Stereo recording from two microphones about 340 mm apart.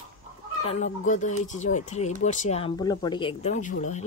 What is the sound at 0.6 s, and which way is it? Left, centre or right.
Speech, centre.